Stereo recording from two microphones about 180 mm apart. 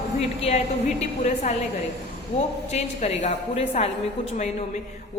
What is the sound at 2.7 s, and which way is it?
A woman's voice, 35° left (ahead or behind).